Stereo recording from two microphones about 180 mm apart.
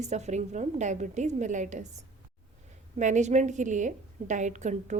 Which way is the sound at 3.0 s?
40° right (ahead or behind).